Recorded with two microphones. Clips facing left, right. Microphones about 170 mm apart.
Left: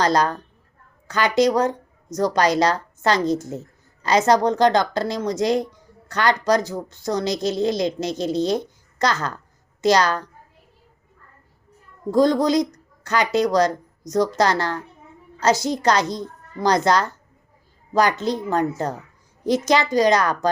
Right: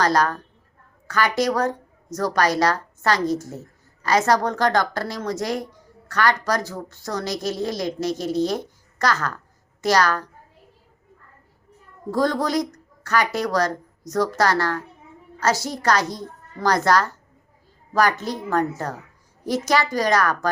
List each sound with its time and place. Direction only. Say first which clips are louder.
0.0 s a woman's voice: left 1 dB; 20° left (ahead or behind)
12.1 s a woman's voice: left 4 dB; 20° left (ahead or behind)